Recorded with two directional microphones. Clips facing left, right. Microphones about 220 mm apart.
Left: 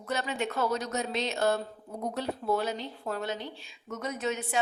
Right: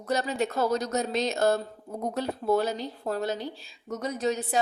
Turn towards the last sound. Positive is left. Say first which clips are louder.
# right 4 dB
turn(degrees=-35)  # may be behind; listen again after turning